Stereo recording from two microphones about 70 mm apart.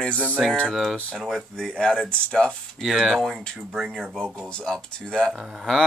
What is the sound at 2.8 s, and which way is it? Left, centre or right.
Speech, centre.